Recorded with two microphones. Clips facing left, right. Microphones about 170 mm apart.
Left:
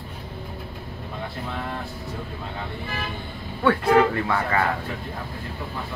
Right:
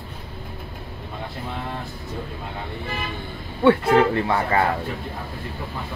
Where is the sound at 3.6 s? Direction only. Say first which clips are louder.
Right 2 dB; 25° right (ahead or behind).